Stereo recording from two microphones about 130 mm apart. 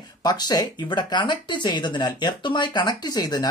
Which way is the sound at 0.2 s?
30° left (ahead or behind).